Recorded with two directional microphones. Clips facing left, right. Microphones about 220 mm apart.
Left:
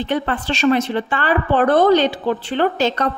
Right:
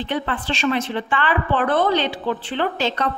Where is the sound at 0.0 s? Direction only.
45° left (ahead or behind).